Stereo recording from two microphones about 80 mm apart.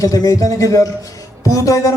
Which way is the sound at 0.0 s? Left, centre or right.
Left.